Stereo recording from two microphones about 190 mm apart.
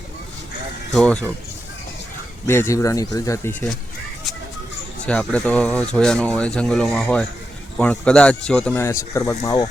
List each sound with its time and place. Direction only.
0.9 s speech: 5° left (ahead or behind)
2.5 s speech: 15° left (ahead or behind)
5.0 s speech: 5° left (ahead or behind)